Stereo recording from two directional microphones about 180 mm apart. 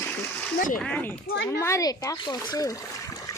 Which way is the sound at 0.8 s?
10° left (ahead or behind).